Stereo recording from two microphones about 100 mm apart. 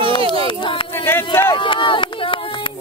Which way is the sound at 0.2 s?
70° right (ahead or behind).